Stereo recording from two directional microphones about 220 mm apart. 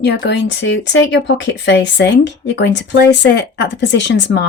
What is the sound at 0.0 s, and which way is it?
Speech, 50° left (ahead or behind).